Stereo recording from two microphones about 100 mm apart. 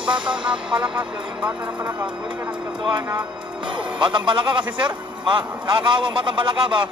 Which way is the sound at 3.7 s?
55° right (ahead or behind).